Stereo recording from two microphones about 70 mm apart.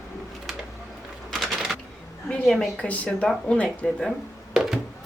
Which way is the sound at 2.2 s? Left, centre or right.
Centre.